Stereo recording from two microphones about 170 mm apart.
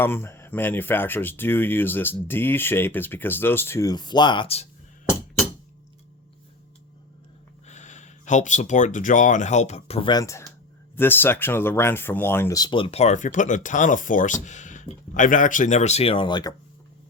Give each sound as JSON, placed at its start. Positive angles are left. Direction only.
{"t": 0.0, "sound": "speech", "side_deg": 15}
{"t": 7.7, "sound": "speech", "side_deg": 45}